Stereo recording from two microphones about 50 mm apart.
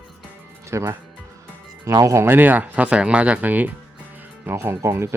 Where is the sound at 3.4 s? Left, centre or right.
Right.